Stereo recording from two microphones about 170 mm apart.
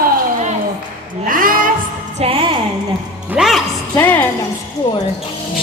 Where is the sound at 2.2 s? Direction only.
30° right (ahead or behind).